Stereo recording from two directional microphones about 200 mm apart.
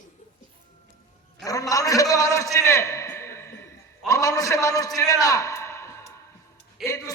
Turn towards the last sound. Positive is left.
turn(degrees=15)  # may be behind; listen again after turning